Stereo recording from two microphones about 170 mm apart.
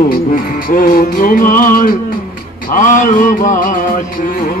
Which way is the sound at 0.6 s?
55° left (ahead or behind).